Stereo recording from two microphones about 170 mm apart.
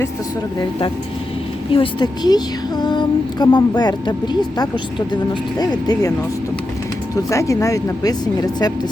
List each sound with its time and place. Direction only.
1.7 s speech: 30° left (ahead or behind)
7.3 s speech: 20° left (ahead or behind)